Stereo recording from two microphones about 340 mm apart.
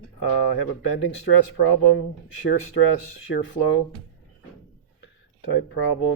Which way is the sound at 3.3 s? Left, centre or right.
Left.